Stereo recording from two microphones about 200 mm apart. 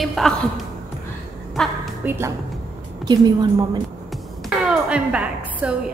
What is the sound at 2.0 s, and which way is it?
A woman's voice, 10° right (ahead or behind).